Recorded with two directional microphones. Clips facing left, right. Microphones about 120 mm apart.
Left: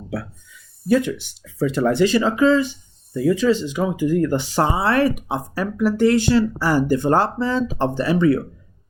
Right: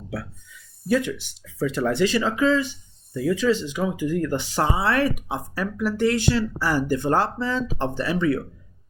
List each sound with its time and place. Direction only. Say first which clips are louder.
0.9 s speech: left 4 dB; 35° left (ahead or behind)